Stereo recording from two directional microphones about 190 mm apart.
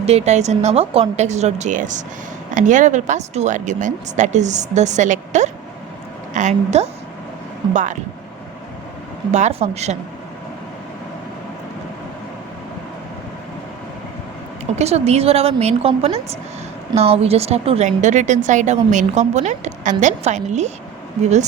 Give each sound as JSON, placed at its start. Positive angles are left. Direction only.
{"t": 0.0, "sound": "a woman's voice", "side_deg": -35}
{"t": 9.3, "sound": "a woman's voice", "side_deg": -35}
{"t": 14.8, "sound": "a woman's voice", "side_deg": -35}